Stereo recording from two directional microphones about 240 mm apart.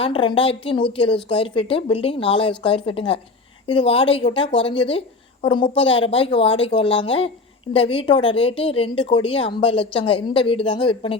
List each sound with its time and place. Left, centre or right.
0.0 s speech: left